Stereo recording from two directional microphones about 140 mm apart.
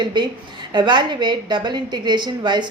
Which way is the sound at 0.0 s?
35° right (ahead or behind).